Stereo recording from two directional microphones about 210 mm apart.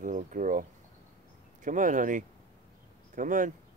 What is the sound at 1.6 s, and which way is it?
Speech, 40° right (ahead or behind).